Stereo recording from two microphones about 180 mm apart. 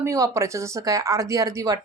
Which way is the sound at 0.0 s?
15° right (ahead or behind).